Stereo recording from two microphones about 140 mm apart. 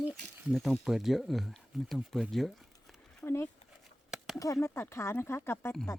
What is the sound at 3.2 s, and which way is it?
Speech, 20° left (ahead or behind).